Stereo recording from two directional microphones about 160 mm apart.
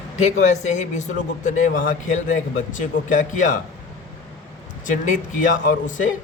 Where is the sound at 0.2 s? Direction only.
45° left (ahead or behind).